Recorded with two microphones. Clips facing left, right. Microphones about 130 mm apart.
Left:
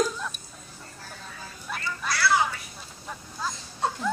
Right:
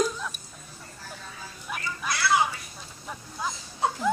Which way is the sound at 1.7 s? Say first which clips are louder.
Left 1 dB; 20° right (ahead or behind).